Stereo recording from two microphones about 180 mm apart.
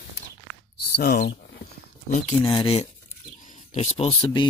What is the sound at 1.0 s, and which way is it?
Speech, 60° left (ahead or behind).